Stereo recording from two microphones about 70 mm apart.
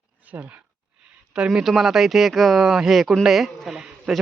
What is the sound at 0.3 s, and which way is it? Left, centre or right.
Speech, right.